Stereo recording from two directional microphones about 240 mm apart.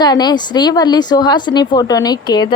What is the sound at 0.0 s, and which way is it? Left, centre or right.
Speech, centre.